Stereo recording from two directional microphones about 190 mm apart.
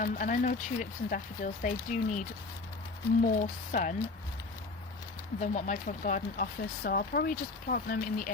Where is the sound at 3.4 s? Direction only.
45° left (ahead or behind).